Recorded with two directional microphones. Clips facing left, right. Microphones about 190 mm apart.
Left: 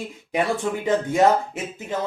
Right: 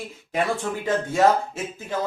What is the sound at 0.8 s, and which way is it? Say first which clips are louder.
Speech: left 1 dB; 15° left (ahead or behind).